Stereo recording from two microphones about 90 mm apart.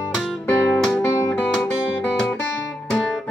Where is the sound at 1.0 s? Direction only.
45° left (ahead or behind).